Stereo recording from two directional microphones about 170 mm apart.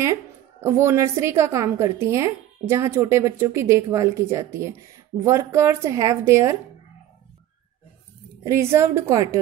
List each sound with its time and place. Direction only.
0.0 s a woman's voice: 15° right (ahead or behind)
8.5 s a woman's voice: 15° right (ahead or behind)